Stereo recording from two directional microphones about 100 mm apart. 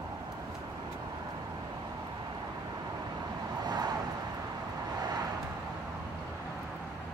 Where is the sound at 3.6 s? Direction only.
45° right (ahead or behind).